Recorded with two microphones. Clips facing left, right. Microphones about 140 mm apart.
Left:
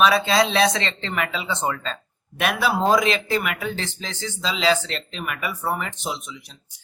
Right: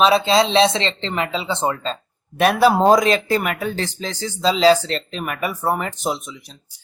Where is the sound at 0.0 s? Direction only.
25° right (ahead or behind).